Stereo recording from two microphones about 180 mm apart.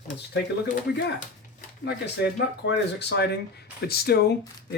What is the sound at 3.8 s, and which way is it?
Speech, 60° left (ahead or behind).